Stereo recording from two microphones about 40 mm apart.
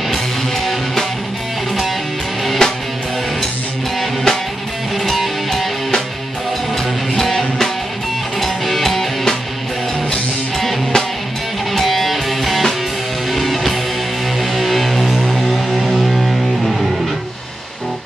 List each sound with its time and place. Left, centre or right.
2.6 s music: centre
5.0 s music: centre
7.2 s music: centre
11.7 s music: centre